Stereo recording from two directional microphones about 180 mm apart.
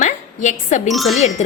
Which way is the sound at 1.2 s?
40° left (ahead or behind).